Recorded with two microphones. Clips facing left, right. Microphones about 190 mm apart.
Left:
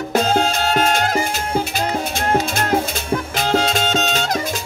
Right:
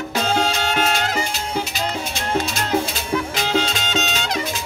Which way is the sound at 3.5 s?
45° left (ahead or behind).